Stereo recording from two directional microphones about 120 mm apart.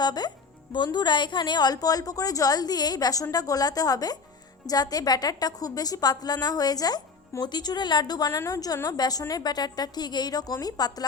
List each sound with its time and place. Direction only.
0.0 s a woman's voice: 35° left (ahead or behind)